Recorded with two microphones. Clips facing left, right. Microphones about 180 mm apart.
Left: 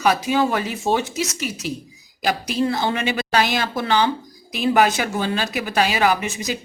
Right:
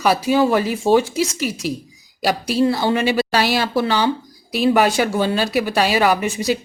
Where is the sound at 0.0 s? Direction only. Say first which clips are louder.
Right 3 dB; 35° right (ahead or behind).